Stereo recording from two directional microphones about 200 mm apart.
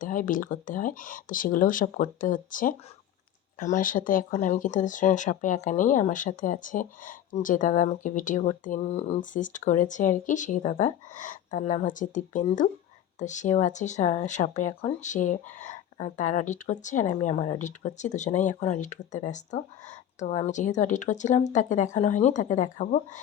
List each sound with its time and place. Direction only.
0.0 s speech: 40° left (ahead or behind)